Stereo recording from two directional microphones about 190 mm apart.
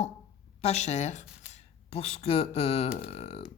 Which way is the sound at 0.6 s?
35° left (ahead or behind).